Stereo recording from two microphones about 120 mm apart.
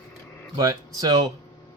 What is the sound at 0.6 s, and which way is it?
Speech, 30° right (ahead or behind).